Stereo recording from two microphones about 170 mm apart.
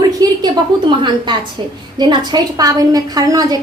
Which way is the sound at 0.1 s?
20° right (ahead or behind).